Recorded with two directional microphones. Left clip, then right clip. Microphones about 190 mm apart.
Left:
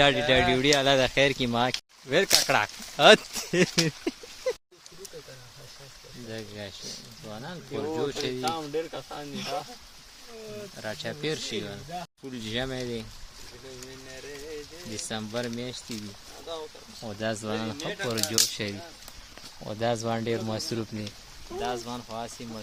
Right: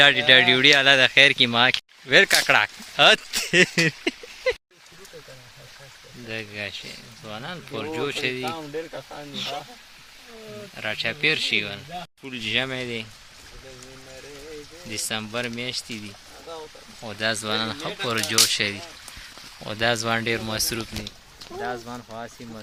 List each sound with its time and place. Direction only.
0.0 s speech: 5° left (ahead or behind)
2.0 s speech: centre (ahead or behind)
6.3 s speech: 5° right (ahead or behind)
8.4 s speech: 15° left (ahead or behind)
10.8 s speech: 5° right (ahead or behind)
15.1 s speech: 5° left (ahead or behind)
17.2 s speech: 15° left (ahead or behind)
21.6 s speech: 5° left (ahead or behind)